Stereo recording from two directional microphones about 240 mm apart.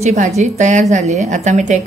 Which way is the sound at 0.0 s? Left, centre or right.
Right.